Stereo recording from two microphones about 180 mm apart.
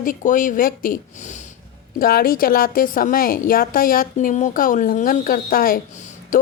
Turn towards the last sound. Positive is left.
turn(degrees=40)  # may be behind; listen again after turning